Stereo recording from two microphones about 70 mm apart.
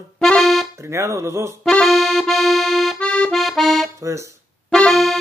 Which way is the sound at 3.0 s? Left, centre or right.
Centre.